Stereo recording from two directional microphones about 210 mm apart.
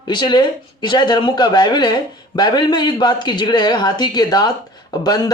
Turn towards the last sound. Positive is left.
turn(degrees=20)  # may be behind; listen again after turning